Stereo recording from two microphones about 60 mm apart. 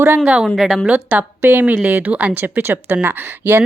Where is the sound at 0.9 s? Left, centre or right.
Right.